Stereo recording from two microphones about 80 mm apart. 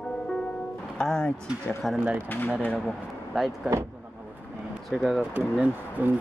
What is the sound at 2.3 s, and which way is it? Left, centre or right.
Speech, left.